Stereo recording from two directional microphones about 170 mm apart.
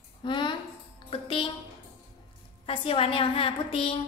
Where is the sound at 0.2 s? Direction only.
30° left (ahead or behind).